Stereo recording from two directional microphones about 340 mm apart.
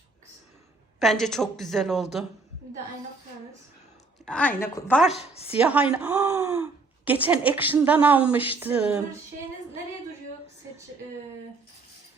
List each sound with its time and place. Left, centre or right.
0.9 s speech: centre
4.3 s speech: centre
5.1 s a woman's voice: centre
5.5 s speech: centre